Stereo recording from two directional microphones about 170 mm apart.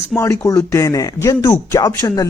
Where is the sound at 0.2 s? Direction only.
15° left (ahead or behind).